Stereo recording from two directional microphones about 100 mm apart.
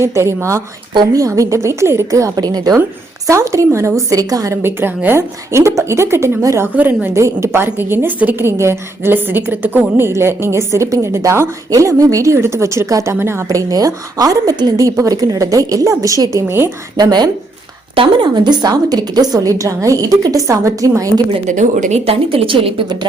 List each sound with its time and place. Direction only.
0.0 s a woman's voice: 30° right (ahead or behind)
4.6 s a woman's voice: 20° right (ahead or behind)
6.7 s a woman's voice: 20° right (ahead or behind)
17.0 s speech: 45° right (ahead or behind)
17.9 s a woman's voice: 55° right (ahead or behind); by 21.1 s 30° right (ahead or behind)
21.9 s a woman's voice: 80° right